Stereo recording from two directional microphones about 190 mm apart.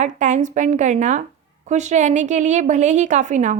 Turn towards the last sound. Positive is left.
turn(degrees=-40)  # may be behind; listen again after turning